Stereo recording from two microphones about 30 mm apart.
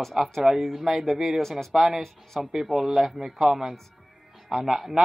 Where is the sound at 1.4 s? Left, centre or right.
Centre.